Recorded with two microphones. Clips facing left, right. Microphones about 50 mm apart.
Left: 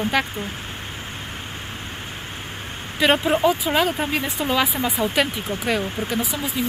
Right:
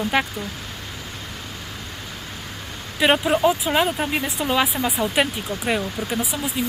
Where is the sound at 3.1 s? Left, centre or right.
Centre.